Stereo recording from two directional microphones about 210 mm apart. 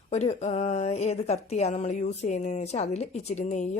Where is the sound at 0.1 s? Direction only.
30° left (ahead or behind).